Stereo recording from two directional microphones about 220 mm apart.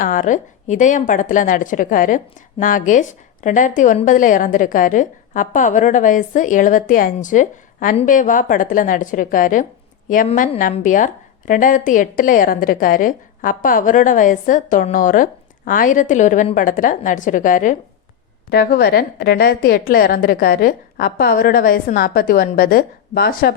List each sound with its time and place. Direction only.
0.0 s a woman's voice: 35° left (ahead or behind)